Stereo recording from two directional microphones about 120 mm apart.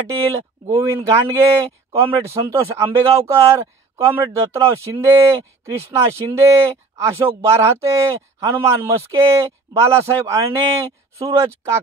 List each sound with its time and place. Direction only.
0.7 s speech: 25° right (ahead or behind)